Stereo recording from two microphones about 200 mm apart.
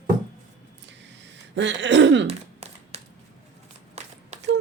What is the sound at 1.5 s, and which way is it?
Female singing, 60° right (ahead or behind).